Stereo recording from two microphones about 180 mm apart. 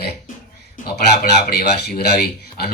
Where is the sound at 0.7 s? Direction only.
60° left (ahead or behind).